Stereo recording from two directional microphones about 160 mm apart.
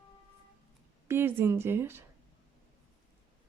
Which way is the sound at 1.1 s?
15° right (ahead or behind).